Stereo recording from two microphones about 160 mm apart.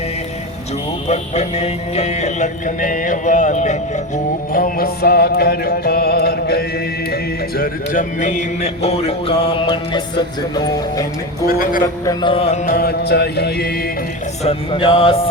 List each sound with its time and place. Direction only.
1.0 s music: 40° left (ahead or behind)
4.5 s music: 65° left (ahead or behind); by 6.7 s 85° left
7.1 s speech: 70° left (ahead or behind); by 10.0 s 30° left (ahead or behind)
11.4 s a man's voice: 60° left (ahead or behind)
12.2 s speech: 35° left (ahead or behind)
12.6 s music: 70° left (ahead or behind)
14.4 s speech: 35° left (ahead or behind)